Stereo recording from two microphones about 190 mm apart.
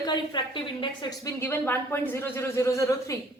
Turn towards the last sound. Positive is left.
turn(degrees=15)  # may be behind; listen again after turning